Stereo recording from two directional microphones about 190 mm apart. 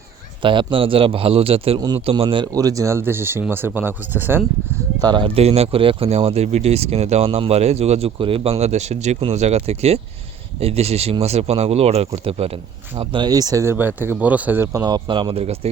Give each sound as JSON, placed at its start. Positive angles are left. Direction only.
{"t": 0.4, "sound": "a man's voice", "side_deg": -25}
{"t": 4.9, "sound": "a man's voice", "side_deg": -20}